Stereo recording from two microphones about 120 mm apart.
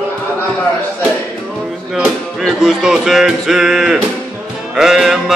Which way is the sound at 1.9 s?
Centre (ahead or behind).